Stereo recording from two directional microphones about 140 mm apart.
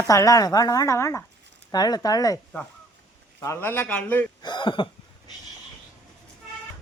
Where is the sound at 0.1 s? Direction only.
25° left (ahead or behind).